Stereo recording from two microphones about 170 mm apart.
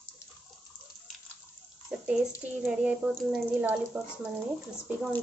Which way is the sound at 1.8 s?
5° right (ahead or behind).